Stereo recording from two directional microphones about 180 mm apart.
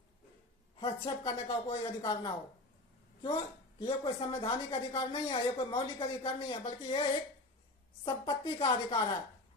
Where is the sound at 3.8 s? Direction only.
25° left (ahead or behind).